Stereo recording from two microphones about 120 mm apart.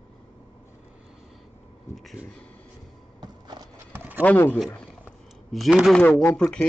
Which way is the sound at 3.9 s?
15° right (ahead or behind).